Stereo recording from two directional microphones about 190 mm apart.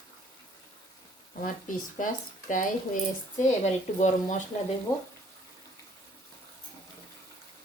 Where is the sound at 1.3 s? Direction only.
45° left (ahead or behind).